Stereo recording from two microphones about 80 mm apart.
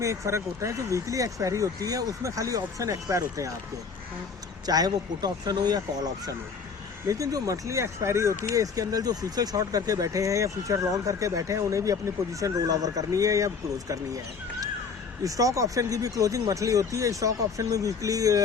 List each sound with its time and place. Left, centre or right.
0.0 s speech: right
4.6 s speech: right
15.2 s speech: right